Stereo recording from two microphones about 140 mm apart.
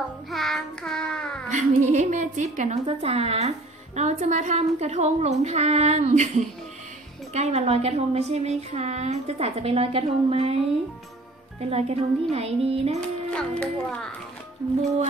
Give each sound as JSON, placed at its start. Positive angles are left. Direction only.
{"t": 0.3, "sound": "child singing", "side_deg": 0}
{"t": 1.5, "sound": "a woman's voice", "side_deg": -60}
{"t": 11.7, "sound": "a woman's voice", "side_deg": -45}
{"t": 13.3, "sound": "a child's voice", "side_deg": 5}